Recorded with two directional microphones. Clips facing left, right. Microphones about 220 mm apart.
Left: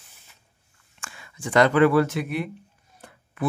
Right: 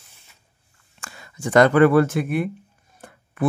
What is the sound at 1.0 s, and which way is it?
Speech, 40° right (ahead or behind).